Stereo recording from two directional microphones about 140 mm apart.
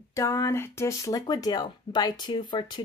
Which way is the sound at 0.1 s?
25° left (ahead or behind).